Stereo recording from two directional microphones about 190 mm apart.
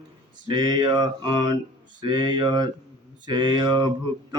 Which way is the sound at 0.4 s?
25° right (ahead or behind).